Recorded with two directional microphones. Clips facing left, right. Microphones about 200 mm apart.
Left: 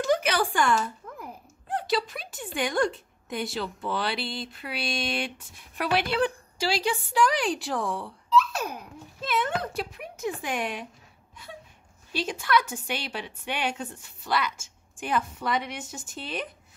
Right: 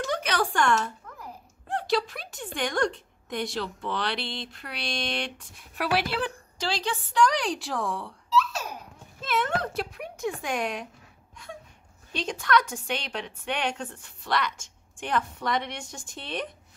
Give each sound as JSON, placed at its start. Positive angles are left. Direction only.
{"t": 0.0, "sound": "a sound", "side_deg": 5}
{"t": 1.7, "sound": "speech", "side_deg": 0}
{"t": 6.6, "sound": "speech", "side_deg": 10}
{"t": 8.4, "sound": "a sound", "side_deg": 55}
{"t": 9.2, "sound": "speech", "side_deg": 0}
{"t": 12.1, "sound": "a woman's voice", "side_deg": 5}